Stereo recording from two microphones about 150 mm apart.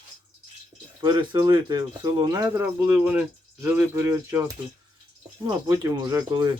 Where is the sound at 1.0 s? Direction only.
25° right (ahead or behind).